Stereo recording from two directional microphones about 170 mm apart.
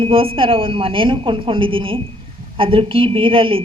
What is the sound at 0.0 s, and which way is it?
A woman's voice, 35° right (ahead or behind).